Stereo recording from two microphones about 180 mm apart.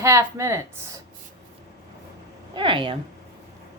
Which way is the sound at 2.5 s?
25° right (ahead or behind).